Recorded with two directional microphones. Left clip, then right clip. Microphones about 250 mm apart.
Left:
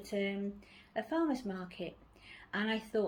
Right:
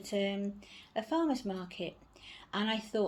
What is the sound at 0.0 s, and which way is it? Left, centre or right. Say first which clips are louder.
Speech: right 3 dB; centre.